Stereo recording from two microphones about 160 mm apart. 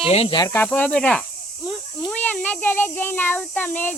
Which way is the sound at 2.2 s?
10° left (ahead or behind).